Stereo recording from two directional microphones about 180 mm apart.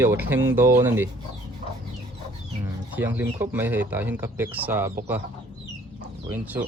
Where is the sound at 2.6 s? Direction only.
10° right (ahead or behind).